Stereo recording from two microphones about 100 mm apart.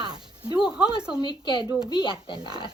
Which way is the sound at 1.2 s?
50° left (ahead or behind).